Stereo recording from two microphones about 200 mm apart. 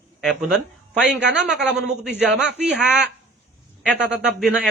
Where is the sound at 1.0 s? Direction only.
60° right (ahead or behind).